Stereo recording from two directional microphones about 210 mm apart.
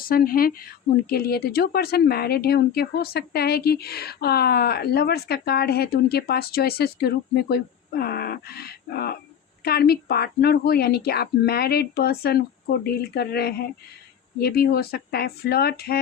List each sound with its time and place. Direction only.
0.0 s a woman's voice: 45° left (ahead or behind)